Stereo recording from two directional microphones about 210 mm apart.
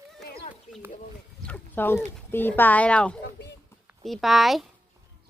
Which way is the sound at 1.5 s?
10° left (ahead or behind).